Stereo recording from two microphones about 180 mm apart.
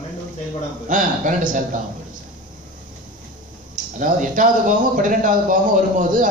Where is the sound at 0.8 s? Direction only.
45° right (ahead or behind).